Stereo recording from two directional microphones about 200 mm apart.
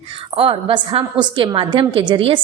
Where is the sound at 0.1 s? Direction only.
25° right (ahead or behind).